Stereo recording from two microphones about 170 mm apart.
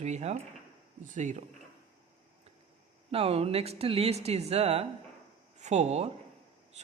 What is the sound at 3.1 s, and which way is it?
Speech, 35° right (ahead or behind).